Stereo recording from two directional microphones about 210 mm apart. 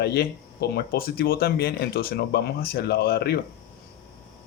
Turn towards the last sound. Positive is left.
turn(degrees=50)  # may be behind; listen again after turning